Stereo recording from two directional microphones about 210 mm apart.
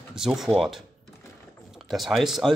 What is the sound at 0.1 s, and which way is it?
Speech, centre (ahead or behind).